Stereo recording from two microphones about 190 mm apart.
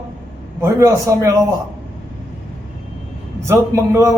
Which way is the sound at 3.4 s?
15° right (ahead or behind).